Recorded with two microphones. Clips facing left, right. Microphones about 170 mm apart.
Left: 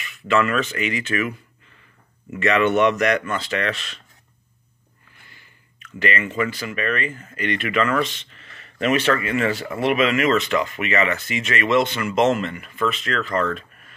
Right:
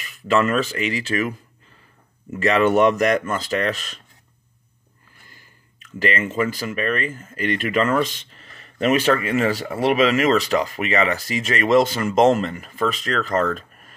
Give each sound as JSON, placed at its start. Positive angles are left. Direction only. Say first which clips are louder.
{"t": 0.0, "sound": "speech", "louder": "right 1 dB", "side_deg": -40}
{"t": 5.9, "sound": "speech", "louder": "right 1 dB", "side_deg": -40}